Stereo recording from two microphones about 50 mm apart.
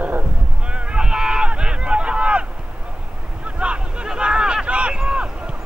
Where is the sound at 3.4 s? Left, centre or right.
Right.